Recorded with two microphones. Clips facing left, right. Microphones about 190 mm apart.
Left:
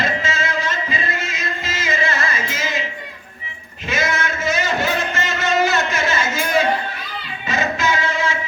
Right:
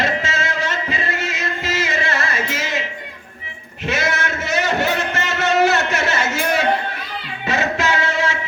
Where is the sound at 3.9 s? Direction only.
70° right (ahead or behind).